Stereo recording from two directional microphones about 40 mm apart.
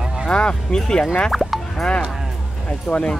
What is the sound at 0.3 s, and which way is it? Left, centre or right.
Speech, left.